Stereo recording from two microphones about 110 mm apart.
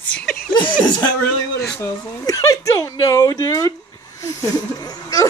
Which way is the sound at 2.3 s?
30° left (ahead or behind).